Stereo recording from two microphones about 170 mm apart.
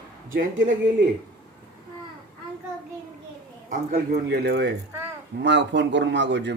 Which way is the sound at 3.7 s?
60° right (ahead or behind).